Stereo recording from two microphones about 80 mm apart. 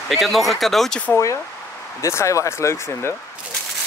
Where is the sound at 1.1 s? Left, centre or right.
Left.